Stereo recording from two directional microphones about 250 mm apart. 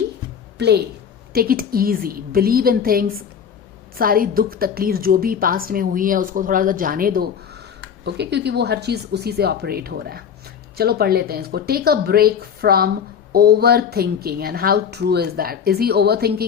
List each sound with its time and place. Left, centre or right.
1.3 s a woman's voice: right